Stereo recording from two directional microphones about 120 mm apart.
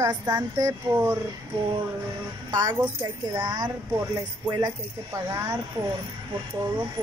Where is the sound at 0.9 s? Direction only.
20° right (ahead or behind).